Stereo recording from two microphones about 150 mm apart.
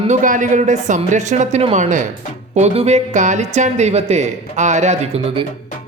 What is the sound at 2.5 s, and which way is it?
Speech, 45° right (ahead or behind).